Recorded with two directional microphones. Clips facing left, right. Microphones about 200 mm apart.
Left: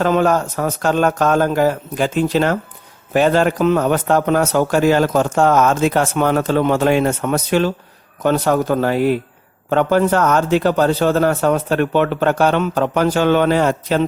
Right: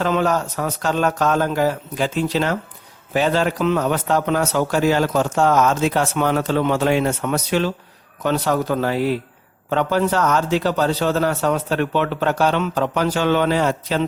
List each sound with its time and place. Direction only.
0.0 s a man's voice: 50° left (ahead or behind)